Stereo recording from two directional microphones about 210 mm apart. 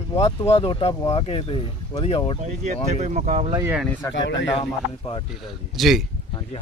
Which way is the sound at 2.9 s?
35° right (ahead or behind).